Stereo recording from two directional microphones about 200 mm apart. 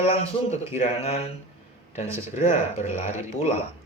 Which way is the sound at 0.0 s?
30° left (ahead or behind).